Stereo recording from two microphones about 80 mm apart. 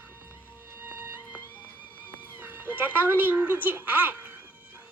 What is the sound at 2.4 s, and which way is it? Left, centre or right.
Speech, right.